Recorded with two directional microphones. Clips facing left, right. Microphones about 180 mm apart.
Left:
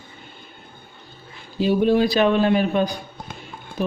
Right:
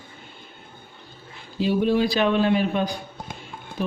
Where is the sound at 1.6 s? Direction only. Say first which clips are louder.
Left 3 dB; 45° left (ahead or behind).